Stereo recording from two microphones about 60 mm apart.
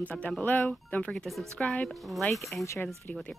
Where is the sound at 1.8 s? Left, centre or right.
Centre.